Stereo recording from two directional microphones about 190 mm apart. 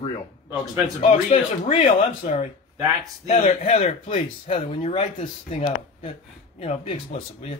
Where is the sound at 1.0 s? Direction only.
35° left (ahead or behind).